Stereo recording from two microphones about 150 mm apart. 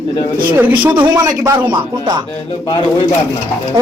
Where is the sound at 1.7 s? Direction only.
30° right (ahead or behind).